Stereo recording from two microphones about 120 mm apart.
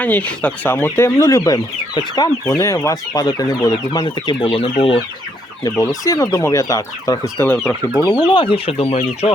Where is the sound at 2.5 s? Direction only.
25° left (ahead or behind); by 4.6 s 50° left (ahead or behind).